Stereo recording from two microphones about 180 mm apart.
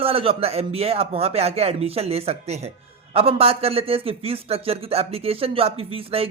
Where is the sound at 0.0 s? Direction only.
30° right (ahead or behind).